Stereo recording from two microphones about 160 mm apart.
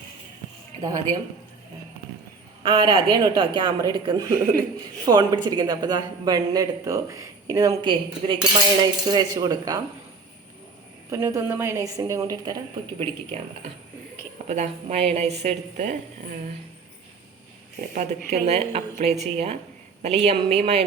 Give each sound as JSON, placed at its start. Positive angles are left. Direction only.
{"t": 2.6, "sound": "speech", "side_deg": -30}
{"t": 11.1, "sound": "speech", "side_deg": -20}
{"t": 14.4, "sound": "a woman's voice", "side_deg": -45}
{"t": 17.7, "sound": "a woman's voice", "side_deg": -50}